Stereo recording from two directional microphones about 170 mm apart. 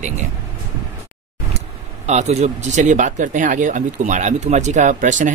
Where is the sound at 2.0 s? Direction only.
40° right (ahead or behind).